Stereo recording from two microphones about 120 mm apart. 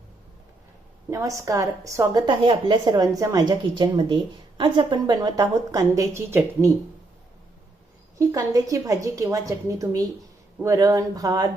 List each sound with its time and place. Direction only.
1.1 s a woman's voice: 25° right (ahead or behind)
2.2 s a woman's voice: 45° right (ahead or behind); by 6.7 s 25° right (ahead or behind)
8.2 s a woman's voice: 30° right (ahead or behind)